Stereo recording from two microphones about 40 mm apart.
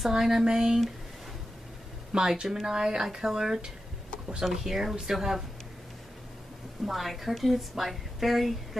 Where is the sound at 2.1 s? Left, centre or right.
Centre.